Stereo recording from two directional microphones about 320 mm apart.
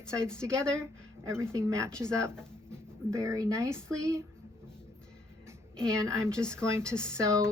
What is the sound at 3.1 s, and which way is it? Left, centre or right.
Speech, centre.